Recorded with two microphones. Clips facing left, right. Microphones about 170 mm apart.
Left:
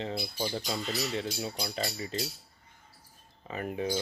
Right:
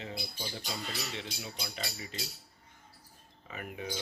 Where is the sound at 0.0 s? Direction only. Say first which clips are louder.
Left 7 dB; 35° left (ahead or behind).